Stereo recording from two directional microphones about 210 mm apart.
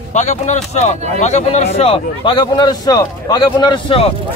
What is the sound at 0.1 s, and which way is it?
Speech, 35° left (ahead or behind).